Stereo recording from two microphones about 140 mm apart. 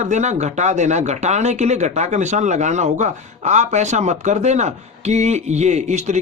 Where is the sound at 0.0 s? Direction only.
55° right (ahead or behind).